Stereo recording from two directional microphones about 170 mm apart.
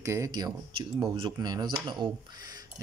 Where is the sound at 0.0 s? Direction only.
15° right (ahead or behind).